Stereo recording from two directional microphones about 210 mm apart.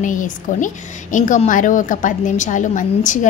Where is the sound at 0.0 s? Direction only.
40° left (ahead or behind).